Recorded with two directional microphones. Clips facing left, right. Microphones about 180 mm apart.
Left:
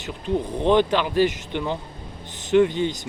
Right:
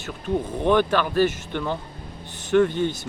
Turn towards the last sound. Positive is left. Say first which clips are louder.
# left 1 dB
turn(degrees=15)  # may be behind; listen again after turning